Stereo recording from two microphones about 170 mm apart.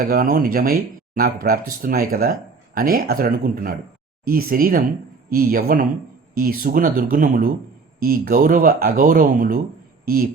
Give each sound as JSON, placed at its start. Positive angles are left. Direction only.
{"t": 0.0, "sound": "speech", "side_deg": -55}